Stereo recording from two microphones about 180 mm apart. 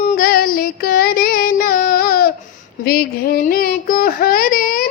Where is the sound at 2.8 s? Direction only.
60° left (ahead or behind).